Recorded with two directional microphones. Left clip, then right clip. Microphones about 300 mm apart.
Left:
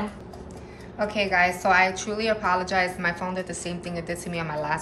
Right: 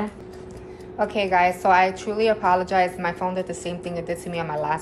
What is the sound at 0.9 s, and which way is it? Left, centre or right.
A woman's voice, centre.